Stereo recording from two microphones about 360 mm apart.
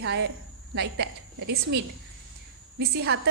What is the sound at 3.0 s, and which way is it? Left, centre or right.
Speech, right.